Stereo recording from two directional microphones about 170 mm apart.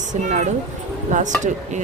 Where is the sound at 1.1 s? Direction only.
45° right (ahead or behind).